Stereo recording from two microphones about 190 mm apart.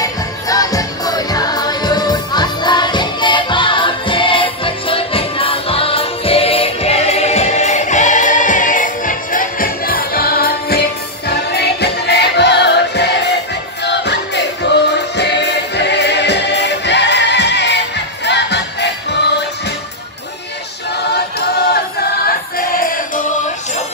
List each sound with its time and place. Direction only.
0.0 s music: 20° left (ahead or behind); by 19.4 s 65° left (ahead or behind)
21.0 s choir: 60° left (ahead or behind)
22.6 s music: 50° left (ahead or behind)